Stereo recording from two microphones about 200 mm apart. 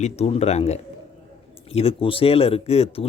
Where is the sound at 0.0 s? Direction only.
35° left (ahead or behind).